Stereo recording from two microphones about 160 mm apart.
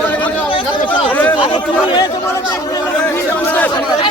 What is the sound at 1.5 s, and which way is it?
Speech, 30° left (ahead or behind).